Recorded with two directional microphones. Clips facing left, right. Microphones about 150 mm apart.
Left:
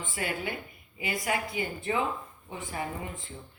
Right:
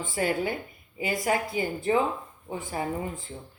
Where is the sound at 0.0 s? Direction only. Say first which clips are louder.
Right 6 dB; 40° right (ahead or behind).